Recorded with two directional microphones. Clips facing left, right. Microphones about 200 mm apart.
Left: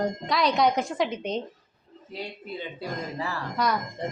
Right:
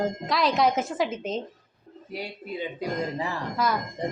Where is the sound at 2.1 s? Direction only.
10° right (ahead or behind).